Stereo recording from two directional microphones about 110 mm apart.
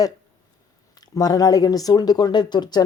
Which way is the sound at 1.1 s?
35° left (ahead or behind).